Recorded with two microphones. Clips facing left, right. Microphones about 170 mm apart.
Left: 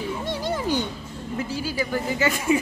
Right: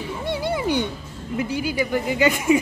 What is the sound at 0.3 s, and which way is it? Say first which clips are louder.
Music: right 4 dB; 10° right (ahead or behind).